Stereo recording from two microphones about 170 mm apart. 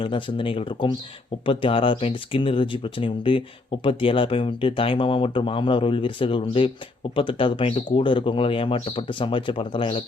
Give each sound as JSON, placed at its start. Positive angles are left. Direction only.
{"t": 0.0, "sound": "speech", "side_deg": 30}